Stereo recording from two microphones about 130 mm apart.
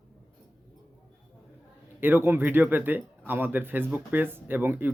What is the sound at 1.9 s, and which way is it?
Speech, 15° right (ahead or behind).